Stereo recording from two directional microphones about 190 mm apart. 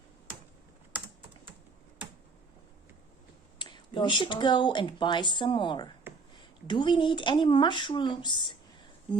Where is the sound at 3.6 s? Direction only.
25° left (ahead or behind).